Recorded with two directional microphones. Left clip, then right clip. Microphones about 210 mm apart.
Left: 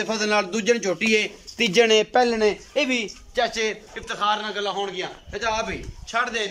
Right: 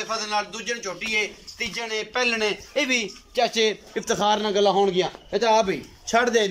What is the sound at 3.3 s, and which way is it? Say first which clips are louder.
Speech: right 2 dB; 15° right (ahead or behind).